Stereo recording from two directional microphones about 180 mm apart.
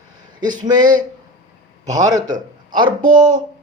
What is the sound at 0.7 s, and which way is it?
Speech, 20° right (ahead or behind).